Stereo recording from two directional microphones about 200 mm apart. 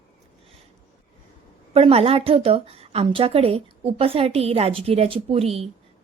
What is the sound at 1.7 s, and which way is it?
A woman's voice, 30° right (ahead or behind).